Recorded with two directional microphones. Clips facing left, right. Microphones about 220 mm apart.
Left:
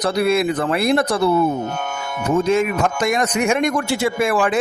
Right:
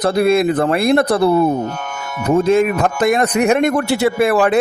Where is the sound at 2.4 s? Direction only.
55° right (ahead or behind).